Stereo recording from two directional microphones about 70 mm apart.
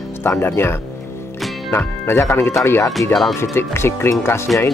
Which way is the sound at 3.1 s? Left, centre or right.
Centre.